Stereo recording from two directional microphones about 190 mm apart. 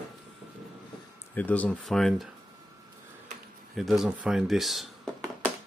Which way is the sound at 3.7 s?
Centre (ahead or behind).